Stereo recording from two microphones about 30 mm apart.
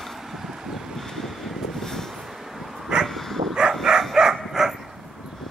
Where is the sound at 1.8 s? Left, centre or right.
Centre.